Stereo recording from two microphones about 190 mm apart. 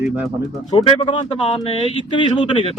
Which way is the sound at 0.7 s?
25° left (ahead or behind).